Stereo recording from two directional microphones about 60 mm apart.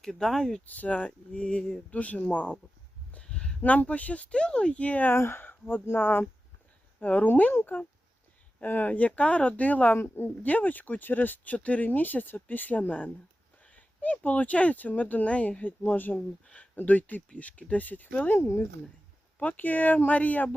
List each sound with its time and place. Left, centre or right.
0.0 s speech: centre
0.6 s speech: left
3.1 s a sound: centre
3.6 s speech: left
5.1 s speech: left
13.7 s a sound: left
14.3 s speech: left
18.3 s speech: left
19.4 s speech: left